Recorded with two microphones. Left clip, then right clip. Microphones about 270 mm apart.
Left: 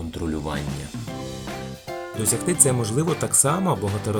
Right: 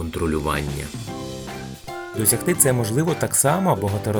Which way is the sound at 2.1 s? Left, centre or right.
Centre.